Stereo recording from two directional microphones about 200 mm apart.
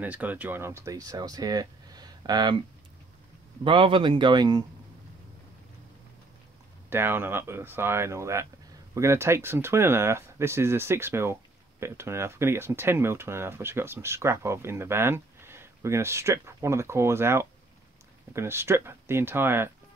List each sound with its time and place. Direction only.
0.0 s speech: 10° right (ahead or behind)
3.6 s speech: 25° right (ahead or behind)
6.9 s speech: 10° right (ahead or behind)